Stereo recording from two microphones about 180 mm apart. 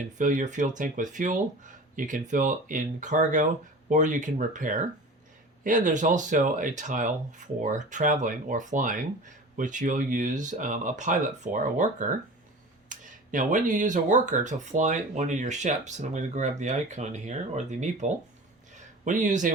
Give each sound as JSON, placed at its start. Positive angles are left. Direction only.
{"t": 0.2, "sound": "speech", "side_deg": -45}